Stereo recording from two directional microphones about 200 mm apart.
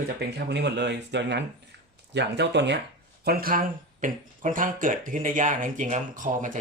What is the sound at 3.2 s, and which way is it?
Speech, 50° right (ahead or behind).